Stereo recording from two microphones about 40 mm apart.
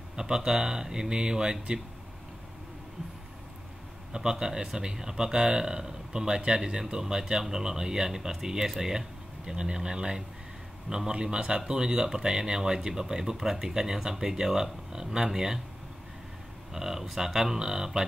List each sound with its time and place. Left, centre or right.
0.1 s speech: centre
4.1 s speech: centre
16.7 s speech: centre